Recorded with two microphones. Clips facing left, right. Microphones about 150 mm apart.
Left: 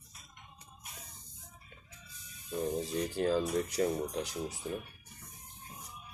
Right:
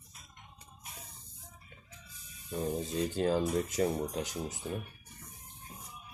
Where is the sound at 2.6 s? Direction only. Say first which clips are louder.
Right 1 dB; 20° right (ahead or behind).